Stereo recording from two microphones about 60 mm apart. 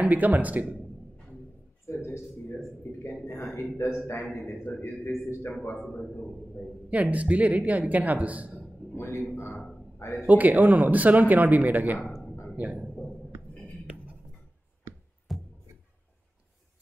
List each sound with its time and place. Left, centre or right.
0.0 s speech: right
1.9 s a sound: left
3.3 s a sound: left
3.7 s a man's voice: left
4.7 s a sound: left
5.0 s a man's voice: left
5.6 s a man's voice: left
6.9 s speech: right
8.9 s a man's voice: left
10.2 s a man's voice: right
14.9 s music: right
15.3 s music: centre